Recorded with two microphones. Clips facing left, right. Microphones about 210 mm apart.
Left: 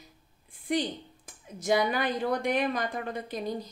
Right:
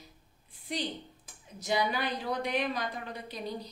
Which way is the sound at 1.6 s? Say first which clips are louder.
Left 4 dB; 50° left (ahead or behind).